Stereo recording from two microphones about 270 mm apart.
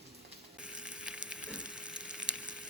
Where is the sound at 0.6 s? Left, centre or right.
Centre.